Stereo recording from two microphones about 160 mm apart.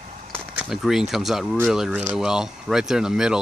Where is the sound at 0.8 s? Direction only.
Centre (ahead or behind).